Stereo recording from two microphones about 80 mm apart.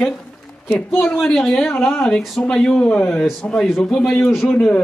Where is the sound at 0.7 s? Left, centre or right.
Centre.